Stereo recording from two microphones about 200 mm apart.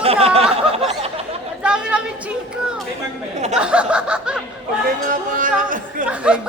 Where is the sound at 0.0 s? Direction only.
30° right (ahead or behind).